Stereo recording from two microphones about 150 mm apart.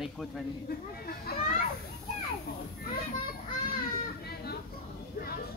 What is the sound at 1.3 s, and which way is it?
Speech, 90° left.